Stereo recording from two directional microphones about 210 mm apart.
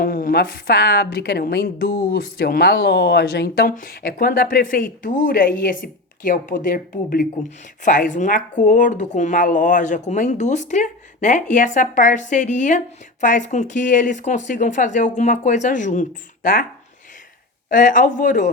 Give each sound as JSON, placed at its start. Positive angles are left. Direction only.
{"t": 0.0, "sound": "a woman's voice", "side_deg": 40}
{"t": 17.7, "sound": "speech", "side_deg": 40}